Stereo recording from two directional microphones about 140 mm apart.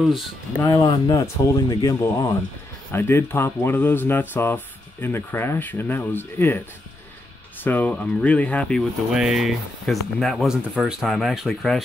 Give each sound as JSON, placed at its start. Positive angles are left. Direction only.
{"t": 0.7, "sound": "speech", "side_deg": 30}
{"t": 7.6, "sound": "speech", "side_deg": 10}